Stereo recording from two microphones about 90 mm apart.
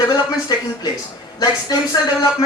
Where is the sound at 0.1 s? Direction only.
45° left (ahead or behind).